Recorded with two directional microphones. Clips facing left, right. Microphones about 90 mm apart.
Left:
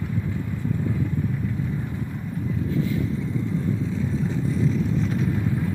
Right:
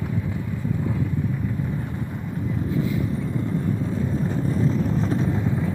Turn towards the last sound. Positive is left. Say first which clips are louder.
# right 1 dB
turn(degrees=-35)  # may be behind; listen again after turning